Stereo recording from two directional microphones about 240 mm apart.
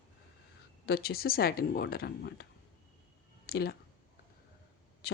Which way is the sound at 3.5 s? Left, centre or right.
Left.